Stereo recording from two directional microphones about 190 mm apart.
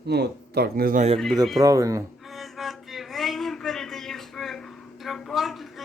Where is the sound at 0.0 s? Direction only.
60° right (ahead or behind).